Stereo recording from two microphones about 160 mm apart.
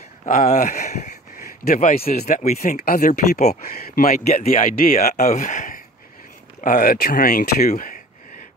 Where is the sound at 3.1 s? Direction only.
45° left (ahead or behind).